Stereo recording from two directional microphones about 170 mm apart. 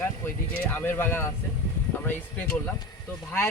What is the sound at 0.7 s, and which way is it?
Speech, 10° left (ahead or behind).